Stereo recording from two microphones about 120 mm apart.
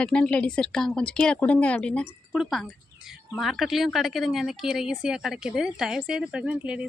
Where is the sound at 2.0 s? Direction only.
5° right (ahead or behind).